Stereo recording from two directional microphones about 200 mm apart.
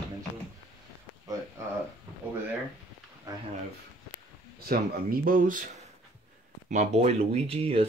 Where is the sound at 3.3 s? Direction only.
15° right (ahead or behind).